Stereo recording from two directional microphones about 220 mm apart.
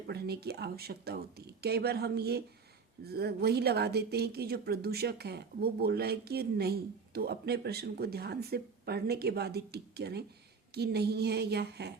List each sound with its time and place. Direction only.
0.1 s speech: 45° right (ahead or behind)